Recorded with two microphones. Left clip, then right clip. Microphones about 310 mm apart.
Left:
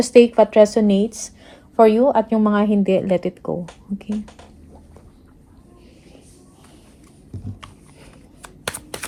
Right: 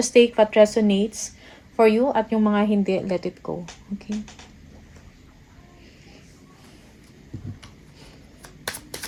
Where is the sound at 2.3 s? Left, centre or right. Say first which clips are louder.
Left 3 dB; left.